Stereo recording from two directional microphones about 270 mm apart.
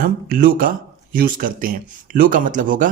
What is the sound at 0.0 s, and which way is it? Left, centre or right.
A man's voice, right.